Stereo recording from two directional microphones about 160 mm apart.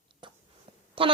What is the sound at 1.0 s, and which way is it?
Speech, 35° right (ahead or behind).